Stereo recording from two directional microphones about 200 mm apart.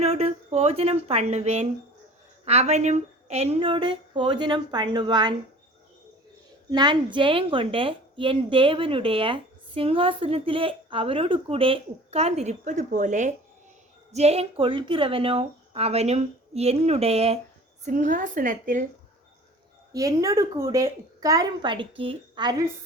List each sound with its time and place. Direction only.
0.0 s a woman's voice: 30° right (ahead or behind)
6.7 s a woman's voice: 20° right (ahead or behind); by 18.9 s 40° right (ahead or behind)
19.9 s a woman's voice: 15° right (ahead or behind)